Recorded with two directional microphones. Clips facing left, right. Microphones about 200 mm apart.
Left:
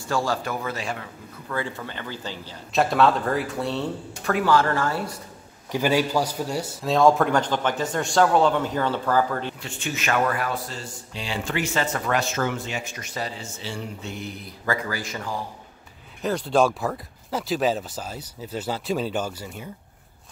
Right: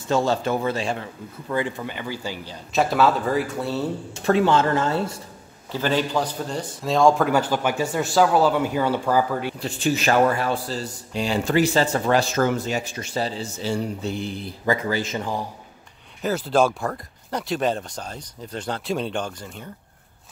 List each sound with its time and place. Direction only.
0.1 s speech: 25° right (ahead or behind)
1.5 s speech: 15° right (ahead or behind)
2.7 s a man's voice: centre (ahead or behind)
4.1 s speech: 25° right (ahead or behind)
5.7 s a man's voice: 10° left (ahead or behind); by 9.6 s 10° right (ahead or behind)
9.6 s speech: 35° right (ahead or behind)
16.2 s a man's voice: 5° right (ahead or behind)